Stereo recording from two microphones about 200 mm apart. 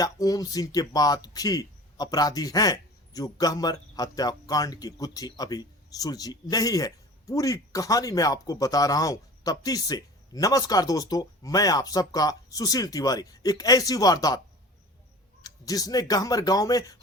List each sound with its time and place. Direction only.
0.0 s speech: 20° left (ahead or behind)
15.4 s speech: 20° left (ahead or behind)